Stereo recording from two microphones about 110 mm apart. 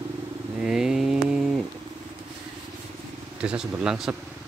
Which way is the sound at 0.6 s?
5° right (ahead or behind).